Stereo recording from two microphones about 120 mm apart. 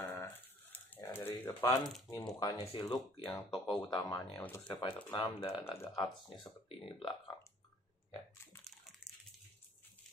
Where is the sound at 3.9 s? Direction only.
35° left (ahead or behind).